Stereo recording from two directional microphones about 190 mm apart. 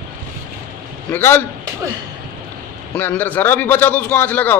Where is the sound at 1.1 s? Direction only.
10° left (ahead or behind).